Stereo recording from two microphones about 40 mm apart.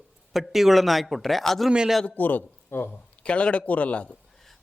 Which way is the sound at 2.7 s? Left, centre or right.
Left.